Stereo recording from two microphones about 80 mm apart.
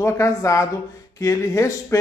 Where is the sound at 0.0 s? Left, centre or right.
Left.